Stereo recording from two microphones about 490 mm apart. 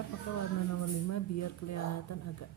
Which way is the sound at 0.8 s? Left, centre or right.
Left.